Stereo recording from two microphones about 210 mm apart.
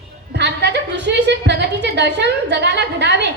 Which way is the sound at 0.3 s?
55° right (ahead or behind).